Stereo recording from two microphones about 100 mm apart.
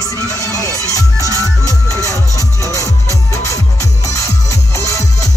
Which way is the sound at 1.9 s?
35° left (ahead or behind).